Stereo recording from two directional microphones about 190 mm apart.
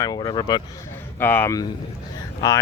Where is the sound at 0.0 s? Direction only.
20° left (ahead or behind).